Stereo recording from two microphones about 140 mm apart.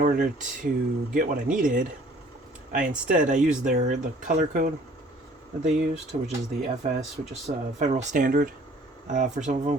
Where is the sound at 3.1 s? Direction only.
60° right (ahead or behind).